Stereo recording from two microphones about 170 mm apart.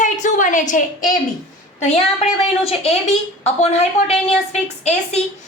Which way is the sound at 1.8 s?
40° left (ahead or behind).